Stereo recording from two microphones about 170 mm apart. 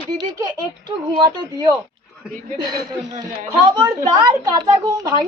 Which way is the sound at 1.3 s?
25° right (ahead or behind).